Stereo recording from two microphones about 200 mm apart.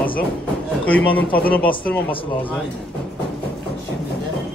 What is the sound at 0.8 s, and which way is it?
Speech, 5° left (ahead or behind).